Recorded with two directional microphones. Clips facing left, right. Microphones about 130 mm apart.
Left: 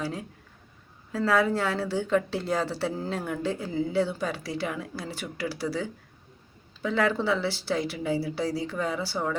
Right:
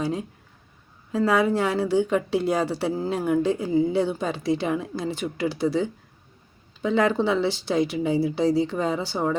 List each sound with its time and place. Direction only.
0.0 s a woman's voice: 20° right (ahead or behind)